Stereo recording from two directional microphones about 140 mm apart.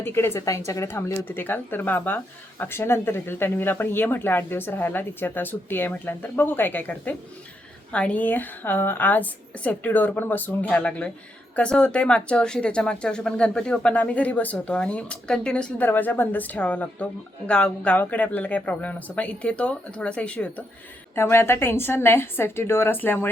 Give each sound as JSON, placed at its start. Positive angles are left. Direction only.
{"t": 0.0, "sound": "speech", "side_deg": 15}